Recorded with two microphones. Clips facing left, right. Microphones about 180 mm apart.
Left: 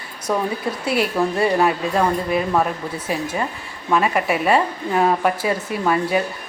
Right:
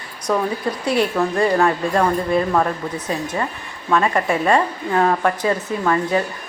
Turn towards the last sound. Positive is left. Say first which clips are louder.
# even
turn(degrees=10)  # may be behind; listen again after turning